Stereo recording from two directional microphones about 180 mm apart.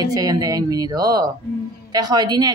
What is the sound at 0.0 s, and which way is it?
Speech, 20° right (ahead or behind).